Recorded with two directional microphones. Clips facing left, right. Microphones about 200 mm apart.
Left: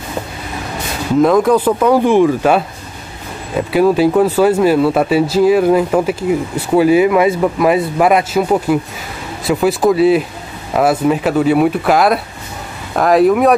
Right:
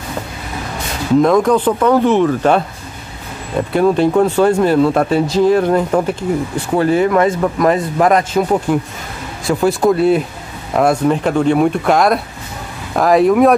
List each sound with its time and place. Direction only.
1.2 s speech: 5° left (ahead or behind)